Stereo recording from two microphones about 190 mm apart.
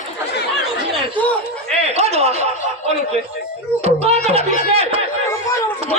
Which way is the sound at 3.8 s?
30° right (ahead or behind).